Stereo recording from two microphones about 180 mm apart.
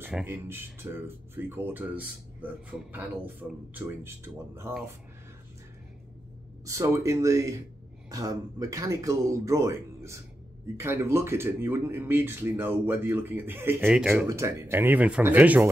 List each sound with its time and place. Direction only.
0.0 s speech: 10° right (ahead or behind)
6.6 s speech: 15° right (ahead or behind)
14.2 s speech: 15° right (ahead or behind)